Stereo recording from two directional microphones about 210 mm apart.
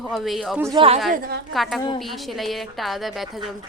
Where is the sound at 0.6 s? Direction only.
15° right (ahead or behind).